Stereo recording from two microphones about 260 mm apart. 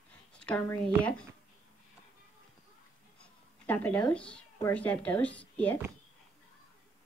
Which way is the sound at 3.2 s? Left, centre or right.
Centre.